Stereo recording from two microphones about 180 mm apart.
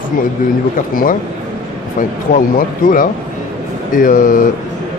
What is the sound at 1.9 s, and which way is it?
A man's voice, 50° left (ahead or behind).